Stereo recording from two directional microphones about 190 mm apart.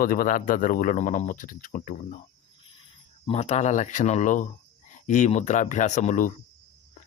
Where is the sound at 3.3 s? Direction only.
35° left (ahead or behind).